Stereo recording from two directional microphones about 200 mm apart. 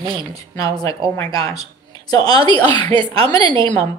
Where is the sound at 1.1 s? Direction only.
15° left (ahead or behind).